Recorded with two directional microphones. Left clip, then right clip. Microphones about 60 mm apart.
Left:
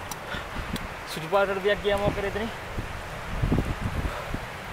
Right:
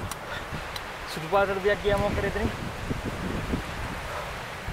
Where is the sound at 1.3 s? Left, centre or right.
Centre.